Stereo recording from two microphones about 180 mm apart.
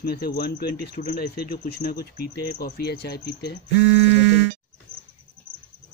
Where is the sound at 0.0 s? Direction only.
60° left (ahead or behind).